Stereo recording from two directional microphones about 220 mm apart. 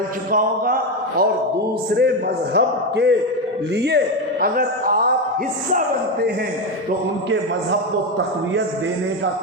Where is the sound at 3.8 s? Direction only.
50° right (ahead or behind).